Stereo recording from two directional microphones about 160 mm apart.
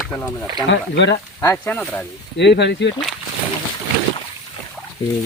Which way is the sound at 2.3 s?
90° left.